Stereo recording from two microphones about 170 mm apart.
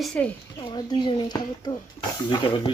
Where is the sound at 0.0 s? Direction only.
5° left (ahead or behind).